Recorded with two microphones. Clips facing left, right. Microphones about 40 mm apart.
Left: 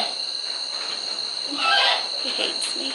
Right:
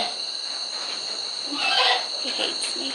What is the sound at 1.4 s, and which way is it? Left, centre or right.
Wild animals, centre.